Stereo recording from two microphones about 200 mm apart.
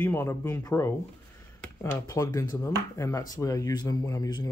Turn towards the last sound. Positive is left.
turn(degrees=20)  # may be behind; listen again after turning